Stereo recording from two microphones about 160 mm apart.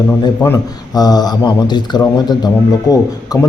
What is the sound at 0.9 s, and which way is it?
A man's voice, 25° left (ahead or behind).